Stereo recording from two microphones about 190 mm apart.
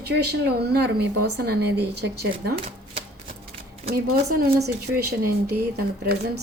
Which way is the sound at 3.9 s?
60° right (ahead or behind).